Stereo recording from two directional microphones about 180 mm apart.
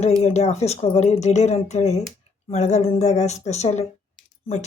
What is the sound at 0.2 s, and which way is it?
Speech, 35° left (ahead or behind).